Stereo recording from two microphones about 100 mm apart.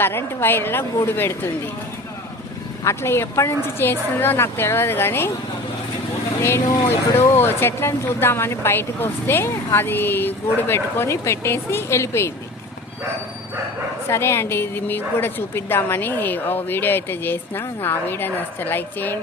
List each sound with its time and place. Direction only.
0.0 s speech: 25° left (ahead or behind)
2.8 s speech: 25° left (ahead or behind)
6.4 s speech: 25° left (ahead or behind)
14.1 s speech: 25° left (ahead or behind)